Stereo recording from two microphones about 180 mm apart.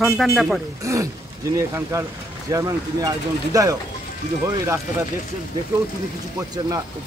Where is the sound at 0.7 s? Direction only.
20° right (ahead or behind).